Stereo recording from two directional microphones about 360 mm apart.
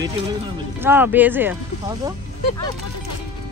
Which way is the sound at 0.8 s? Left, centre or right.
Centre.